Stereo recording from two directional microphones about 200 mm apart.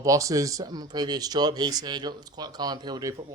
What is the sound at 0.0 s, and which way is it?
Speech, 15° right (ahead or behind).